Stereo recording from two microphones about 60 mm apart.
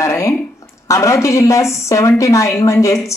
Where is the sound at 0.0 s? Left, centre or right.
Left.